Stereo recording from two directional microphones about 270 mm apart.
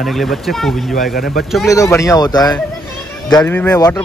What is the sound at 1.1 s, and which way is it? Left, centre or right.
Speech, left.